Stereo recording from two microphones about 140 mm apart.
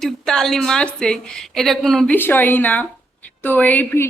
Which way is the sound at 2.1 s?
15° left (ahead or behind).